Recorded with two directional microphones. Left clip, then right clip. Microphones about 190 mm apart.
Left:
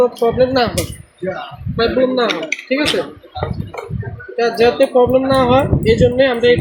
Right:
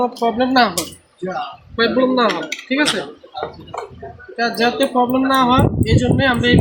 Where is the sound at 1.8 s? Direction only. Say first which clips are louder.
Left 1 dB; 55° right (ahead or behind).